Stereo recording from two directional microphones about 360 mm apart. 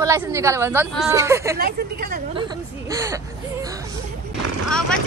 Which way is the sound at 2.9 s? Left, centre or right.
Centre.